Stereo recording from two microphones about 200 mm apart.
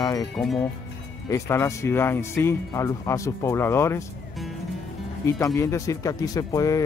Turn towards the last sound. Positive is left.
turn(degrees=15)  # may be behind; listen again after turning